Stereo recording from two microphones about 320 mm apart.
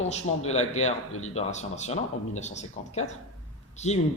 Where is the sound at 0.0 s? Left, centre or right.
Centre.